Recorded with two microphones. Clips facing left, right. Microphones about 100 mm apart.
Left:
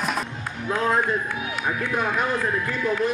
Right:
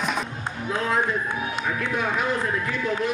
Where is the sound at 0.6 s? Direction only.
45° left (ahead or behind).